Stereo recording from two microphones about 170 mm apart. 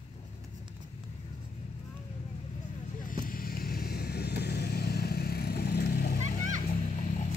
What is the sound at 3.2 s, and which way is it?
Vehicle, 60° left (ahead or behind).